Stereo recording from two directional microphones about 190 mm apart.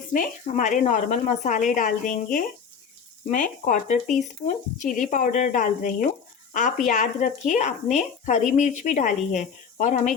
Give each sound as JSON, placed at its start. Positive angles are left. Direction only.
{"t": 0.1, "sound": "speech", "side_deg": 45}